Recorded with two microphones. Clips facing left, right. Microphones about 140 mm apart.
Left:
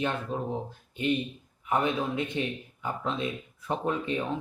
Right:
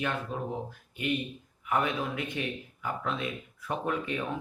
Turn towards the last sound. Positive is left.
turn(degrees=25)  # may be behind; listen again after turning